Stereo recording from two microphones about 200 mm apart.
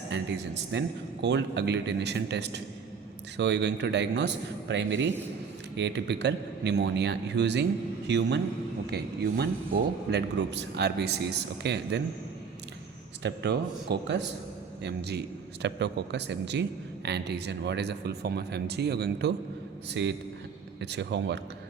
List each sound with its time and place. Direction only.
0.1 s a man's voice: 65° right (ahead or behind)
13.2 s a man's voice: 55° right (ahead or behind)